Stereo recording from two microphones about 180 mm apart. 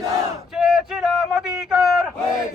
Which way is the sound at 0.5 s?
Centre (ahead or behind).